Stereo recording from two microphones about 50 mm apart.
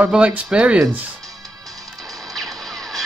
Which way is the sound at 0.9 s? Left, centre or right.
Right.